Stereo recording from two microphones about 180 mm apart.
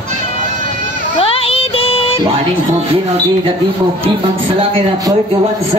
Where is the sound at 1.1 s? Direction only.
30° left (ahead or behind).